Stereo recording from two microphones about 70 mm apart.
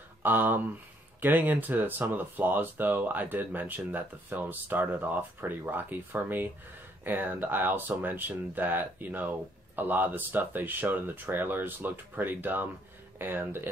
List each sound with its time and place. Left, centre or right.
0.2 s speech: right